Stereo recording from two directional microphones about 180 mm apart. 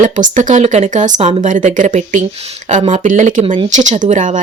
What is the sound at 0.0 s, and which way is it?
Speech, 45° right (ahead or behind).